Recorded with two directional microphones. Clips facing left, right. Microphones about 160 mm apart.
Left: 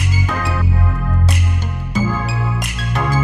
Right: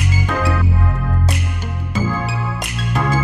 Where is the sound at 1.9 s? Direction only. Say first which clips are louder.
Left 1 dB; centre (ahead or behind).